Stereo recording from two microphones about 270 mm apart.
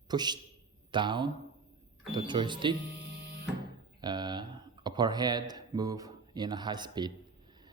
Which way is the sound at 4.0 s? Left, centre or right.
Centre.